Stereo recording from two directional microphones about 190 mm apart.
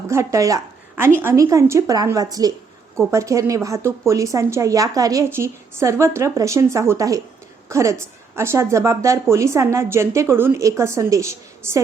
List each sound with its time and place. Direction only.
0.1 s a woman's voice: 15° right (ahead or behind)